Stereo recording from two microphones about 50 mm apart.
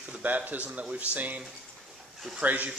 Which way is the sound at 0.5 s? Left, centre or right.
Right.